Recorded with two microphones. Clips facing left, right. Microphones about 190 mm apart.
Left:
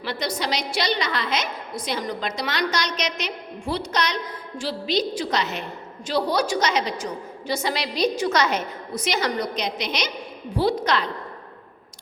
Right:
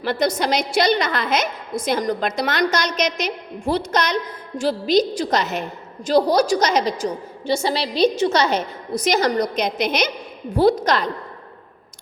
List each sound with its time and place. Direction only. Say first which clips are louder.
0.0 s a woman's voice: right 7 dB; 50° right (ahead or behind)
7.4 s a woman's voice: right 5 dB; 30° right (ahead or behind)